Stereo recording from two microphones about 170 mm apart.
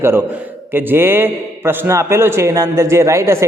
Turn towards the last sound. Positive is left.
turn(degrees=-15)  # may be behind; listen again after turning